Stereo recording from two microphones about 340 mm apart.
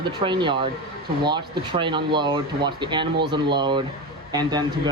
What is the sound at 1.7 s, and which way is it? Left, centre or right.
Speech, centre.